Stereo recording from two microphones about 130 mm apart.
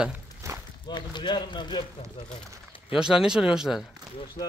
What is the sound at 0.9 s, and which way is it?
Speech, 35° left (ahead or behind).